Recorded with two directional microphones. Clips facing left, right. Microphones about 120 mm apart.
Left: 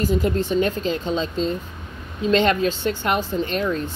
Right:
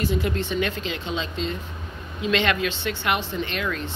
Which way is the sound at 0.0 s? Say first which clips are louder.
Left 4 dB; 45° left (ahead or behind).